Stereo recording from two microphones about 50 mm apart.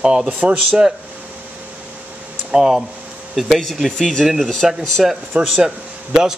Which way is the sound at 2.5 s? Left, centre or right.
Centre.